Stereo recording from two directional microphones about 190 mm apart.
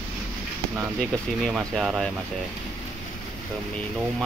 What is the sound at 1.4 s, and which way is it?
Speech, centre (ahead or behind).